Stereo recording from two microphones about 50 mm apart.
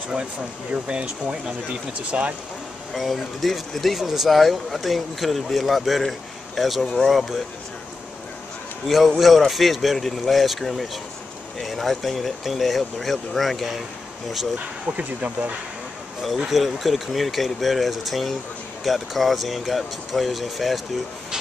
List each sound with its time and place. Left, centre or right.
0.8 s speech: centre
2.9 s speech: centre
8.8 s speech: centre
14.9 s speech: right
16.4 s speech: centre